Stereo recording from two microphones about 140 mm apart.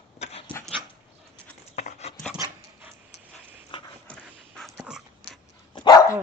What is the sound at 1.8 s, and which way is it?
Dog, 50° left (ahead or behind).